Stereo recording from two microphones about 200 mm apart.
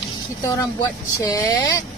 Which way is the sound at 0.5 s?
15° left (ahead or behind).